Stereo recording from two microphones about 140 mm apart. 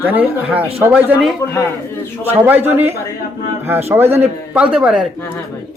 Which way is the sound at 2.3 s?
15° right (ahead or behind).